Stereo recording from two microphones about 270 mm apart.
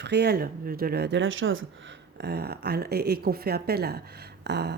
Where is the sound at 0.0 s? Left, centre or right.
Right.